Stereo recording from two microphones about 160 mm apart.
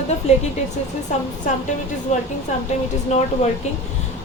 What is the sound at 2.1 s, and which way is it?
Speech, 45° left (ahead or behind).